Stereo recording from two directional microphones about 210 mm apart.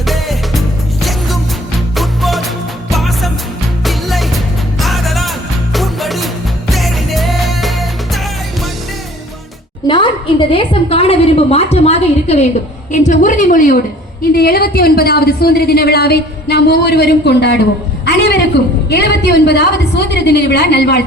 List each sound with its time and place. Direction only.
0.0 s music: centre (ahead or behind)
2.0 s music: centre (ahead or behind)
9.8 s a sound: 20° left (ahead or behind)
10.5 s a woman's voice: 25° left (ahead or behind); by 17.6 s 50° left (ahead or behind)
18.0 s a sound: 55° left (ahead or behind)
18.9 s a woman's voice: 50° left (ahead or behind)